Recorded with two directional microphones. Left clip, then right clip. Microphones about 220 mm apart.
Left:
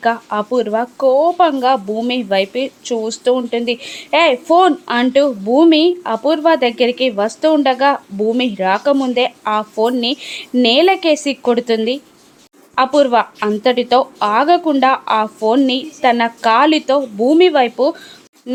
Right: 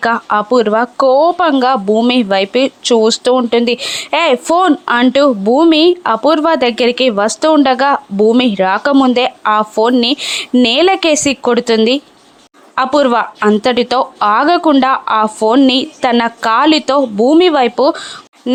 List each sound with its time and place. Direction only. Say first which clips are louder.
0.0 s speech: right 4 dB; 15° right (ahead or behind)